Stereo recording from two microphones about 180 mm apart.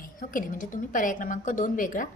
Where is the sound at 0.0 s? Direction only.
50° left (ahead or behind).